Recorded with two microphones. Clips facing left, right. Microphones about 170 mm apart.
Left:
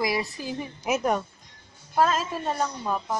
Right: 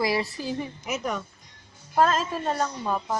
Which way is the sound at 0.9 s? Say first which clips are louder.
Left 5 dB; 45° left (ahead or behind).